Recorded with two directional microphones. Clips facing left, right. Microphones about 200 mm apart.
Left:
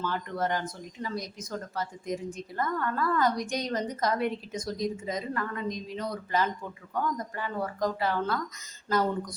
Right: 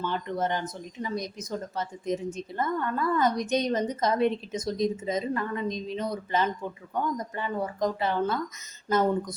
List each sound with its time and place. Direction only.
0.0 s speech: 20° right (ahead or behind)